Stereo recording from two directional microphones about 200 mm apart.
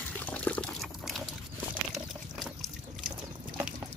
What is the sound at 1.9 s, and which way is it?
Pour, centre (ahead or behind).